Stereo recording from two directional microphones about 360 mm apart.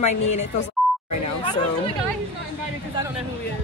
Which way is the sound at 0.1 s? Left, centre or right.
Left.